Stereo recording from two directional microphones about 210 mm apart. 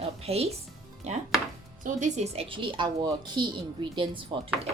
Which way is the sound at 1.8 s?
35° right (ahead or behind).